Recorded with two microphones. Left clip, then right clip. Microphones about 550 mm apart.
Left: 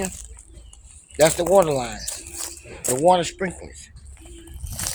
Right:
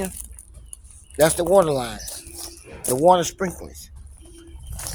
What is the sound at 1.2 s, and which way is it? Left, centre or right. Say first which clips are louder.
Speech: even; right.